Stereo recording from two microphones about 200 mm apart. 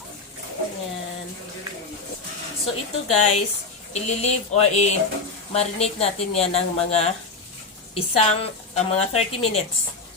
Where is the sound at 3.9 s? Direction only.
35° left (ahead or behind).